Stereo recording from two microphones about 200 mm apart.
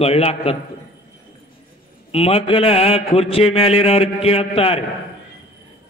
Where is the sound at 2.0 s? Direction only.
30° left (ahead or behind).